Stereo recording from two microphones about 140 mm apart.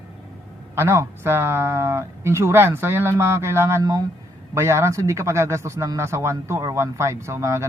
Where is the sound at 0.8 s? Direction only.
15° right (ahead or behind).